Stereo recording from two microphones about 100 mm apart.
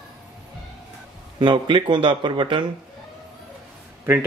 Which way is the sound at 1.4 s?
55° right (ahead or behind).